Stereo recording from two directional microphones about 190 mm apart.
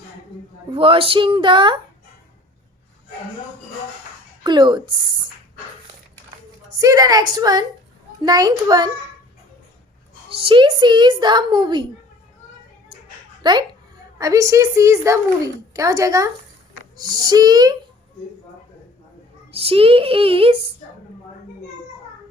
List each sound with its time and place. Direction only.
0.7 s a woman's voice: 30° right (ahead or behind)
4.4 s a woman's voice: 25° right (ahead or behind)
6.7 s a woman's voice: 20° right (ahead or behind)
10.2 s a woman's voice: 30° right (ahead or behind)
13.4 s a child's voice: 25° right (ahead or behind)
19.5 s a woman's voice: 30° right (ahead or behind)